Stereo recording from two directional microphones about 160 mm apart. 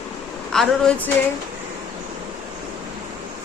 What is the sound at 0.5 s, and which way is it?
Speech, 5° left (ahead or behind).